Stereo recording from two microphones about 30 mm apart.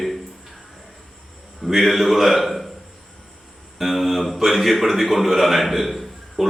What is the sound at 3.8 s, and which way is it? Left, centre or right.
A man's voice, centre.